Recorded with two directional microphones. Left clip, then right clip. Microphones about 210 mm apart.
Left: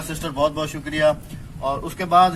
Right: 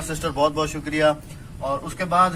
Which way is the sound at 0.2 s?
10° right (ahead or behind).